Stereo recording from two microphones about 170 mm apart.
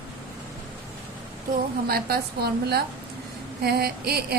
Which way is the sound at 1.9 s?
65° right (ahead or behind).